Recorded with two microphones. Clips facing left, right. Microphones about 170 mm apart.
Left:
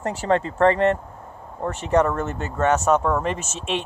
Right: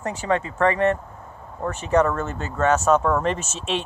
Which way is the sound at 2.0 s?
20° left (ahead or behind).